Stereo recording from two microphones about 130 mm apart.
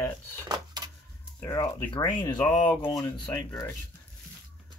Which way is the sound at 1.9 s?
35° left (ahead or behind).